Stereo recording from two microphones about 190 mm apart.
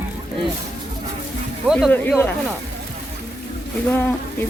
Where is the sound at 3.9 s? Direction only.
10° left (ahead or behind).